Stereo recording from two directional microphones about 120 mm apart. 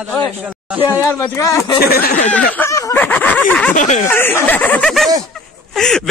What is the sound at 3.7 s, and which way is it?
Speech, 90° left.